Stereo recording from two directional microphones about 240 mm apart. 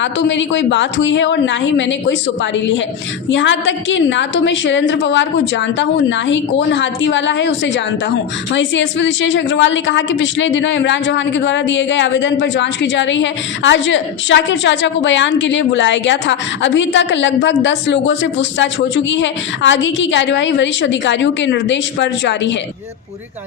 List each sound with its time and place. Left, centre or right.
0.0 s a woman's voice: left